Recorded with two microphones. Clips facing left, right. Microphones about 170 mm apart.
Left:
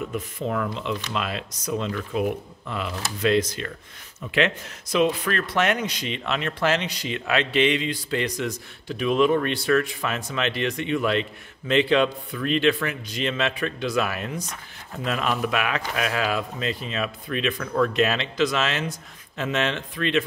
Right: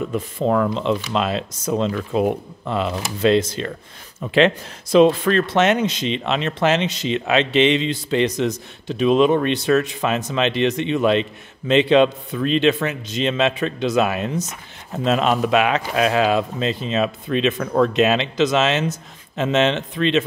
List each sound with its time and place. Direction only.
1.1 s speech: 25° right (ahead or behind)